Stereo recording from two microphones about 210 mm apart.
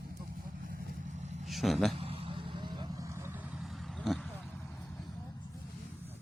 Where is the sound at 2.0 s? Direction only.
25° right (ahead or behind); by 4.3 s centre (ahead or behind).